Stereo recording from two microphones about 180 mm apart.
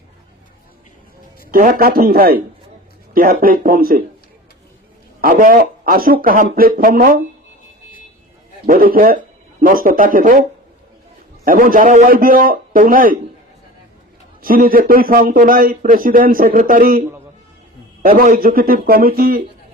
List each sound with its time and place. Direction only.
1.5 s speech: 50° right (ahead or behind)
5.2 s speech: 55° right (ahead or behind)
8.6 s speech: 55° right (ahead or behind)
11.4 s speech: 50° right (ahead or behind)
14.4 s speech: 50° right (ahead or behind)
18.0 s speech: 50° right (ahead or behind)